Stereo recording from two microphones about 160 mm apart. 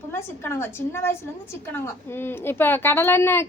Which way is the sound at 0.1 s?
15° left (ahead or behind).